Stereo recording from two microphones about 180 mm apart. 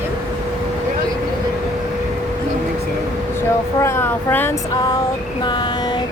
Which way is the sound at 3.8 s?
15° left (ahead or behind).